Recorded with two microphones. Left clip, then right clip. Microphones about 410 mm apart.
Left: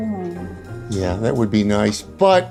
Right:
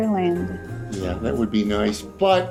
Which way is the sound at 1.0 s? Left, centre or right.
Left.